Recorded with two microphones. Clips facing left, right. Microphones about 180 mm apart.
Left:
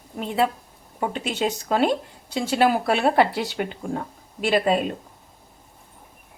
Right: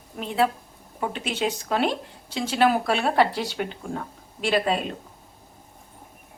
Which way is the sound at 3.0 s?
15° left (ahead or behind).